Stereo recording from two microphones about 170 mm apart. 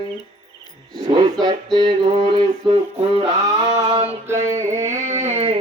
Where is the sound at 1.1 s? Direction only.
25° right (ahead or behind).